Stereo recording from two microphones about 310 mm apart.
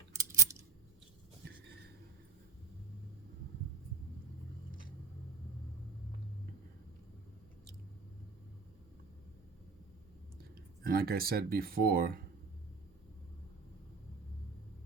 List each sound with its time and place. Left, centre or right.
0.1 s typing: centre
10.8 s speech: right